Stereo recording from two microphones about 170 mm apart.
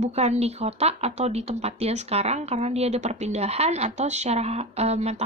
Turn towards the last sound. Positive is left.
turn(degrees=-40)  # may be behind; listen again after turning